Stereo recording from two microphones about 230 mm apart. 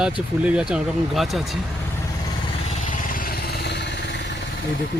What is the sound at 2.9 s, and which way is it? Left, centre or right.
Vehicle, left.